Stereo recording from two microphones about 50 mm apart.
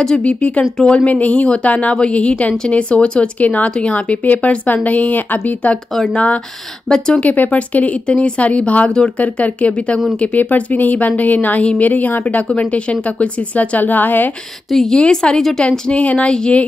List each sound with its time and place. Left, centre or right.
0.2 s a woman's voice: left
14.7 s speech: centre
15.0 s a woman's voice: centre
15.9 s a woman's voice: left